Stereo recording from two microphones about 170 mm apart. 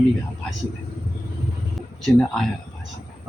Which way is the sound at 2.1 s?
Centre (ahead or behind).